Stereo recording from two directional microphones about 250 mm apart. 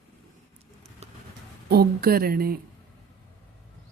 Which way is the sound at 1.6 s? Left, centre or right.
Right.